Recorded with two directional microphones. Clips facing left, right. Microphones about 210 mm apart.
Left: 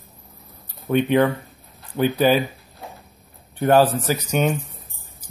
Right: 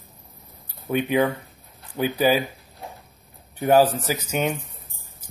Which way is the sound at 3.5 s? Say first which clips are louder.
Left 1 dB; 10° right (ahead or behind).